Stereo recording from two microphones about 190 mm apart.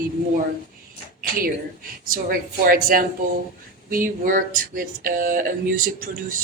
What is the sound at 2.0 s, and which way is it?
Speech, 45° right (ahead or behind).